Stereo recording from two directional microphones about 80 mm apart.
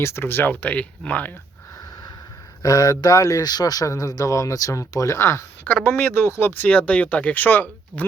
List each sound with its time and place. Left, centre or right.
0.0 s speech: left; by 1.3 s centre
2.6 s speech: left
3.4 s speech: left
5.6 s speech: left
6.7 s speech: centre